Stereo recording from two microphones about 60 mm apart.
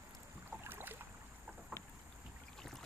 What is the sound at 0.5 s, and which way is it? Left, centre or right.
Boat, right.